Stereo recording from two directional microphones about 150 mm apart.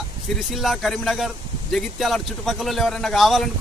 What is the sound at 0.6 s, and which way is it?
A man's voice, centre (ahead or behind).